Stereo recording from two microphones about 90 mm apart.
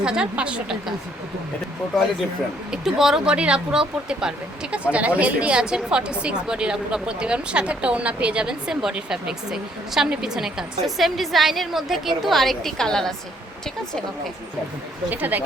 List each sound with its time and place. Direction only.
0.0 s speech: 10° right (ahead or behind)
2.8 s speech: 5° right (ahead or behind)
15.1 s speech: 20° right (ahead or behind)